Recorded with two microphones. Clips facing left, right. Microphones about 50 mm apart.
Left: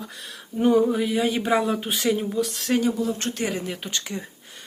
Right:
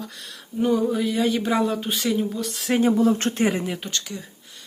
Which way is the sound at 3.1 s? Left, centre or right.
Right.